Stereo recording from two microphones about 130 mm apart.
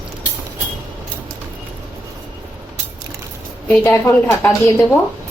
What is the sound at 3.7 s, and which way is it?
A woman's voice, 20° left (ahead or behind).